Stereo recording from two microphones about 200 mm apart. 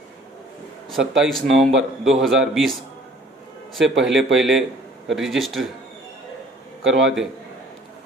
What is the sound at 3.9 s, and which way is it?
Speech, 65° right (ahead or behind).